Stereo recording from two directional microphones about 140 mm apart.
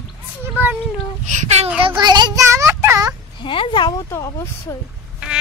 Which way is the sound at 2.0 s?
30° right (ahead or behind).